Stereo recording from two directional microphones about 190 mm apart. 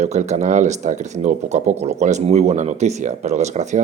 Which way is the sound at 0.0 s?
35° right (ahead or behind).